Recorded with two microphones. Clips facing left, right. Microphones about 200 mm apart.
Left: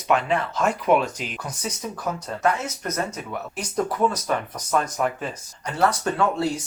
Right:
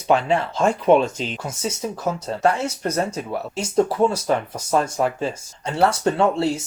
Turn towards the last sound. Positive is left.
turn(degrees=-25)  # may be behind; listen again after turning